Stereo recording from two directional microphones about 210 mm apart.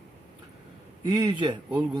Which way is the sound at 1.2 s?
20° right (ahead or behind).